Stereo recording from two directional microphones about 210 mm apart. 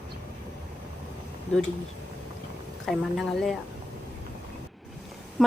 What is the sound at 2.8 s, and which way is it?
Speech, centre (ahead or behind).